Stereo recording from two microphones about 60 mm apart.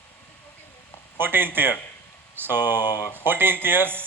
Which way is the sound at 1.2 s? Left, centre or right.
Right.